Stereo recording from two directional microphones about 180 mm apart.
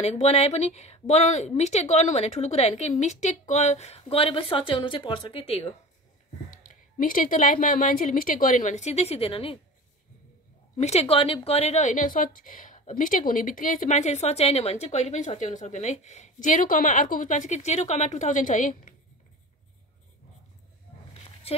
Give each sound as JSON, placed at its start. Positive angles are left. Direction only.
{"t": 0.0, "sound": "a woman's voice", "side_deg": 35}
{"t": 6.7, "sound": "a woman's voice", "side_deg": 50}
{"t": 10.8, "sound": "a woman's voice", "side_deg": 35}
{"t": 21.5, "sound": "a sound", "side_deg": 35}